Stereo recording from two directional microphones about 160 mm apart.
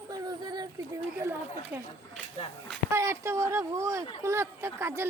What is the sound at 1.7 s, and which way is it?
Speech, 10° right (ahead or behind).